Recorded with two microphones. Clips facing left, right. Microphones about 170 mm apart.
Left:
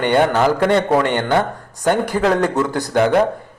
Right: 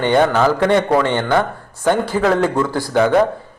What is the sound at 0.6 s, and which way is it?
Speech, 20° right (ahead or behind).